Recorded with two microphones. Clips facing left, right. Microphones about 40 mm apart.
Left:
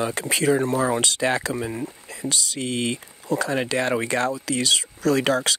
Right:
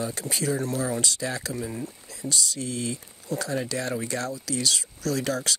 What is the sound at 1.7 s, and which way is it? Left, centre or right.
Speech, left.